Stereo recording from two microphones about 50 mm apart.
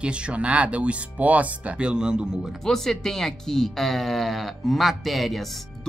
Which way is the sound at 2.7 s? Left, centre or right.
Centre.